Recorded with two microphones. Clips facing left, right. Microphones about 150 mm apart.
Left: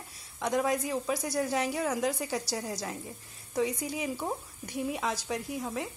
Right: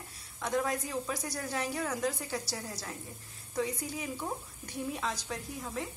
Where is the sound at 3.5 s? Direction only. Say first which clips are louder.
Left 4 dB; 15° left (ahead or behind).